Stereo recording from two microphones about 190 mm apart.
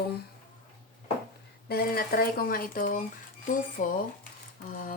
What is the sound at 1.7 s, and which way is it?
Speech, 55° left (ahead or behind).